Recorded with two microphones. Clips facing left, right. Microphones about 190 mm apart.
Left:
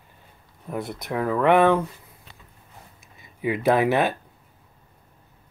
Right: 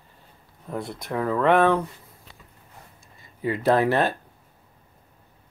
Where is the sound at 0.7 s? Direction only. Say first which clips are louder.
Left 1 dB; 20° left (ahead or behind).